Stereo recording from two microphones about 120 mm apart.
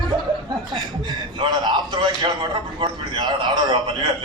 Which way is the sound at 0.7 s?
35° right (ahead or behind).